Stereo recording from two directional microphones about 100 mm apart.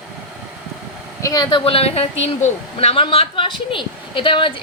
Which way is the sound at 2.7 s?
65° left (ahead or behind).